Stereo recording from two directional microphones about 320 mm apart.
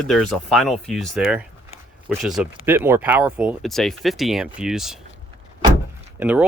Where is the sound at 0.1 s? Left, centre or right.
Centre.